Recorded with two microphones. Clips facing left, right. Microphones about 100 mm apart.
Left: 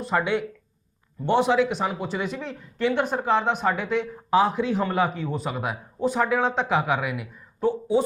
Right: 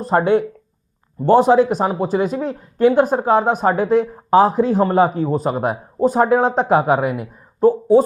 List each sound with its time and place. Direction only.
0.0 s speech: 40° right (ahead or behind)